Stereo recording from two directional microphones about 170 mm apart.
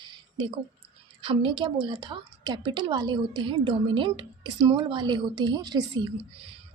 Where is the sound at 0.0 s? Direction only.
25° right (ahead or behind).